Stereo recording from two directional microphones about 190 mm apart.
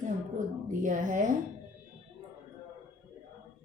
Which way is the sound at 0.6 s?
40° right (ahead or behind).